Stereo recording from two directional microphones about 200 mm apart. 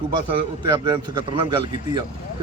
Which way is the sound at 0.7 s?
20° right (ahead or behind).